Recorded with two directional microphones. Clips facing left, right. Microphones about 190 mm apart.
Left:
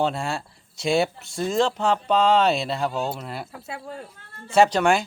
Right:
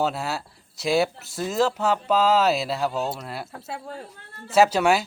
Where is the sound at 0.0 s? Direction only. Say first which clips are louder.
Left 1 dB; 5° right (ahead or behind).